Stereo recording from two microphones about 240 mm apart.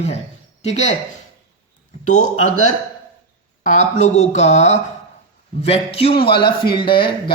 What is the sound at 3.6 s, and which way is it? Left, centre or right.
Speech, left.